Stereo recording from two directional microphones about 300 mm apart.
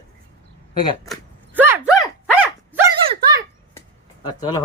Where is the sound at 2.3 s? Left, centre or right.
Centre.